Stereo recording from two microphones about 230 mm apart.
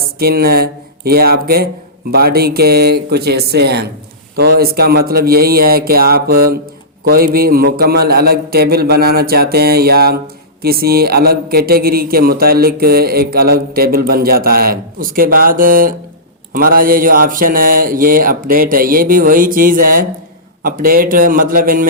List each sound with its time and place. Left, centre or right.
0.2 s a man's voice: right